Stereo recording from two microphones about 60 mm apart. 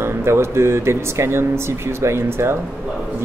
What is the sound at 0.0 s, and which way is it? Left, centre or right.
Speech, right.